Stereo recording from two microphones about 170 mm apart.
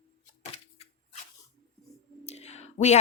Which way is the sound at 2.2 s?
40° left (ahead or behind).